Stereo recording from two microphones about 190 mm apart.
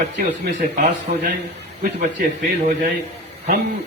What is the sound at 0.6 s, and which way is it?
Speech, 45° right (ahead or behind).